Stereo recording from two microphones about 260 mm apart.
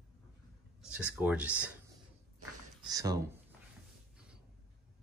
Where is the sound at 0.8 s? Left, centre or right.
Centre.